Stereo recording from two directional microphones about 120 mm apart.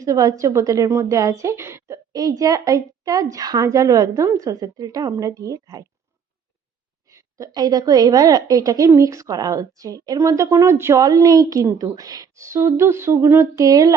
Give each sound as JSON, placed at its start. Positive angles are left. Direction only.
{"t": 0.0, "sound": "a woman's voice", "side_deg": -30}
{"t": 7.1, "sound": "a woman's voice", "side_deg": -25}
{"t": 13.7, "sound": "a woman's voice", "side_deg": -30}